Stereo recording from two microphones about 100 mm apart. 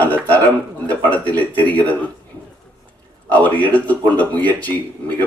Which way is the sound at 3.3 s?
15° left (ahead or behind).